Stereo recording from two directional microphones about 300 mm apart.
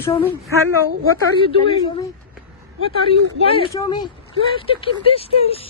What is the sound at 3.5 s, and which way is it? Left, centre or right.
Speech, centre.